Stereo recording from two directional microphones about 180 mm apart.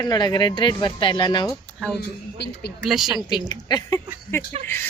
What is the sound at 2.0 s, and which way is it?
Speech, 70° left (ahead or behind).